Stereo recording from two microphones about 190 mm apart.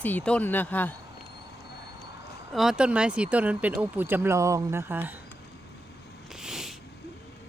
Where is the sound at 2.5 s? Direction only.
5° right (ahead or behind).